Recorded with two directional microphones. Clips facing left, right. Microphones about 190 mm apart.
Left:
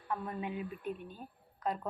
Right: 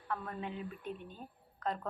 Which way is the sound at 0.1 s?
15° left (ahead or behind).